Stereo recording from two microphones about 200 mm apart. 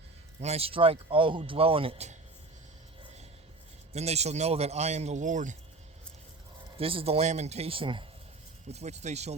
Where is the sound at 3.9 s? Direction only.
30° right (ahead or behind).